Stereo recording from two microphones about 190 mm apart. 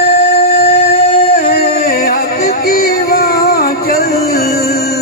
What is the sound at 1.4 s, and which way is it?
Music, 55° left (ahead or behind).